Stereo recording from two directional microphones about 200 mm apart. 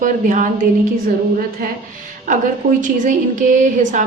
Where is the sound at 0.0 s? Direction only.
40° right (ahead or behind).